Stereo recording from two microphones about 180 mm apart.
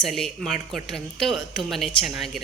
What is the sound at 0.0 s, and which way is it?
A woman's voice, centre (ahead or behind).